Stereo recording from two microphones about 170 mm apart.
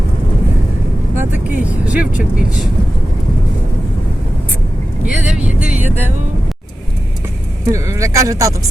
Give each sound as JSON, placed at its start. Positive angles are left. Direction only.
{"t": 1.1, "sound": "vehicle", "side_deg": -10}
{"t": 5.1, "sound": "vehicle", "side_deg": -5}
{"t": 7.7, "sound": "speech", "side_deg": -20}